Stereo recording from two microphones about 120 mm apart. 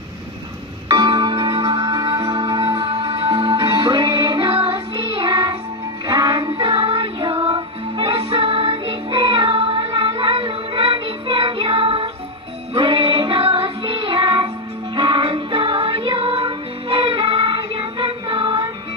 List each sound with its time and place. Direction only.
0.8 s music: 40° right (ahead or behind)